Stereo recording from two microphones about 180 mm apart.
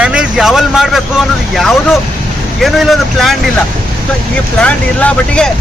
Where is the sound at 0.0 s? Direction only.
5° right (ahead or behind).